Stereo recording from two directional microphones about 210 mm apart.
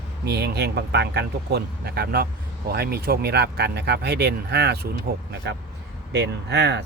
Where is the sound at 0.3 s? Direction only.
50° right (ahead or behind).